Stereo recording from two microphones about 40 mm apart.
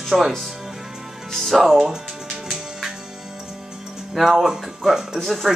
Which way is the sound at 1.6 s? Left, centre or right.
Centre.